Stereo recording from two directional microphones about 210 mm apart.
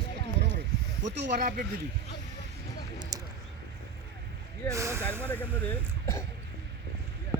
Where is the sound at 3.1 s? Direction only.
15° right (ahead or behind).